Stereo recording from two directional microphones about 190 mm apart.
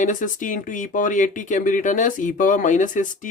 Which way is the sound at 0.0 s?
40° left (ahead or behind).